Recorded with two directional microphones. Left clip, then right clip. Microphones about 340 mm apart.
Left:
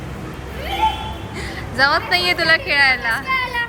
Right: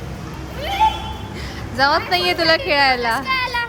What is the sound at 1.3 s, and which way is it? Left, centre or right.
A woman's voice, centre.